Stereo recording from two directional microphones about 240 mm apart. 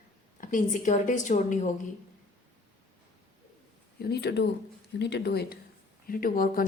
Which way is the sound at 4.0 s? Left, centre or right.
Left.